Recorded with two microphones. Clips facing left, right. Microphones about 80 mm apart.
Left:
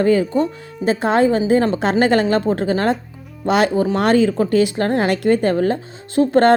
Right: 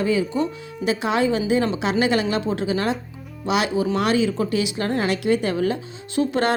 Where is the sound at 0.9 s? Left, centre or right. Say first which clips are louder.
Left 5 dB; left.